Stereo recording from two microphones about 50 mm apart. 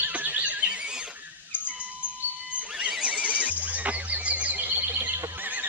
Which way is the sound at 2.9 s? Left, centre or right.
Centre.